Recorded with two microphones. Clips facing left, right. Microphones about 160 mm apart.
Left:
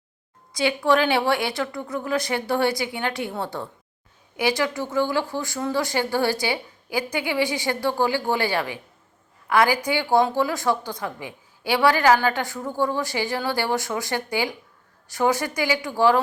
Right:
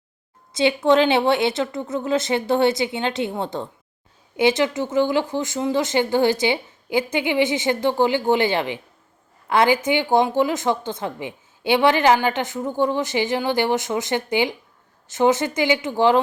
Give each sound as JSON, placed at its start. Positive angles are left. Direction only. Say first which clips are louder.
{"t": 0.5, "sound": "speech", "louder": "right 4 dB", "side_deg": -25}